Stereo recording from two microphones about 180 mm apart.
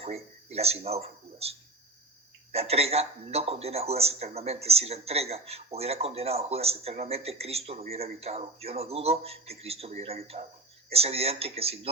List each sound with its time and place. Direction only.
0.0 s speech: 35° right (ahead or behind)